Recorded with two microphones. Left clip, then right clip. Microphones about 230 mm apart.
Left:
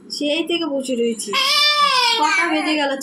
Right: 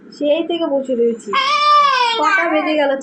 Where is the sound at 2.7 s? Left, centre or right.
Left.